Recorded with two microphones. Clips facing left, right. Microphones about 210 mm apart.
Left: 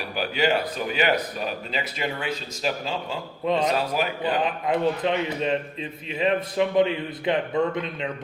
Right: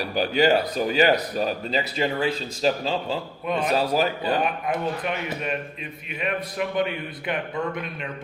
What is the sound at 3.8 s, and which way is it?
Speech, 35° right (ahead or behind).